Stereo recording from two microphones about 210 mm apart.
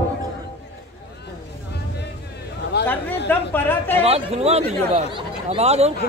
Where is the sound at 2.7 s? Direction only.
50° left (ahead or behind).